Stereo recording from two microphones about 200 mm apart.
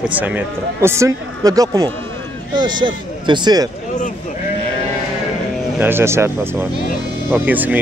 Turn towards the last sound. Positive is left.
turn(degrees=-10)  # may be behind; listen again after turning